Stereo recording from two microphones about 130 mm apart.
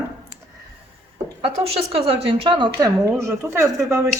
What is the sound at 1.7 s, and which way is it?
A woman's voice, 45° right (ahead or behind).